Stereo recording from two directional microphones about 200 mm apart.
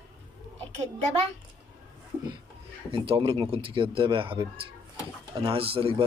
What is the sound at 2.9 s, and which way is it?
Speech, 25° right (ahead or behind).